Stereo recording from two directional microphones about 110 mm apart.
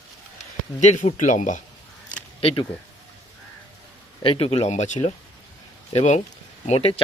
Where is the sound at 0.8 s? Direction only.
90° left.